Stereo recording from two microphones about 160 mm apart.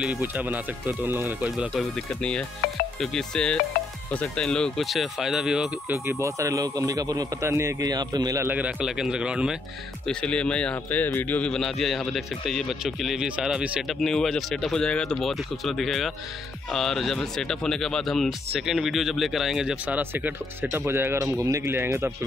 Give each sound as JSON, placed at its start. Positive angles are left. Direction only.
{"t": 0.0, "sound": "speech", "side_deg": -10}
{"t": 2.0, "sound": "speech", "side_deg": 5}
{"t": 8.5, "sound": "speech", "side_deg": -10}
{"t": 10.0, "sound": "speech", "side_deg": 5}